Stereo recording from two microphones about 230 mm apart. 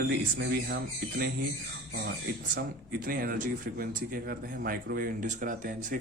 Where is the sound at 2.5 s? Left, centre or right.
Right.